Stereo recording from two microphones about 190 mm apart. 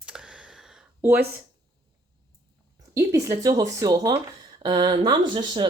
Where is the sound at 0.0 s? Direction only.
5° right (ahead or behind).